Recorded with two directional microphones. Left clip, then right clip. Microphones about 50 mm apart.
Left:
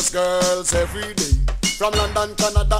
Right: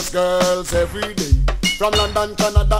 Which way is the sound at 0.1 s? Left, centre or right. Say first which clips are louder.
Right 3 dB; right.